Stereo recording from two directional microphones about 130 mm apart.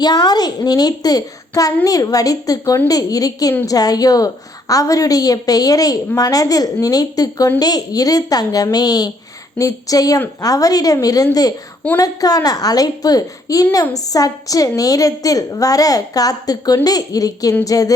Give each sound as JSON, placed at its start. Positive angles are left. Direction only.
{"t": 0.0, "sound": "a woman's voice", "side_deg": 30}